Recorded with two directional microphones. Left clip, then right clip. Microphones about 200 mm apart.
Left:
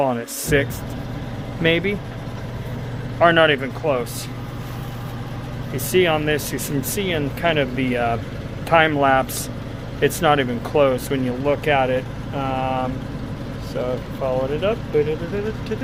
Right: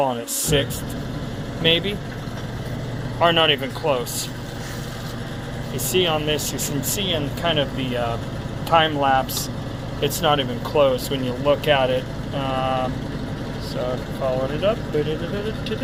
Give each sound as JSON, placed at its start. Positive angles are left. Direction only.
{"t": 0.0, "sound": "speech", "side_deg": 25}
{"t": 3.2, "sound": "speech", "side_deg": 25}
{"t": 5.7, "sound": "speech", "side_deg": 30}
{"t": 11.4, "sound": "speech", "side_deg": 15}